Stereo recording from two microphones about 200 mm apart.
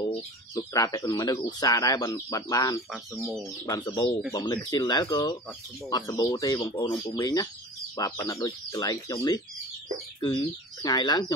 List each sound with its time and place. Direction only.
0.0 s speech: 25° left (ahead or behind)